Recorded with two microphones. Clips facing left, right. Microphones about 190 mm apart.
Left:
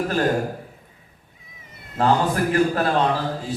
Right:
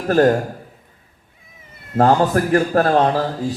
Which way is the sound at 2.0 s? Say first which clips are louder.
Right 5 dB; 45° right (ahead or behind).